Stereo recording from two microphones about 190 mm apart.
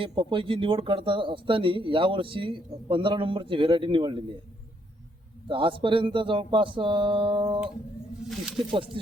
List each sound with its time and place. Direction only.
0.0 s speech: 25° right (ahead or behind)
5.5 s speech: 25° right (ahead or behind)
8.2 s speech: centre (ahead or behind)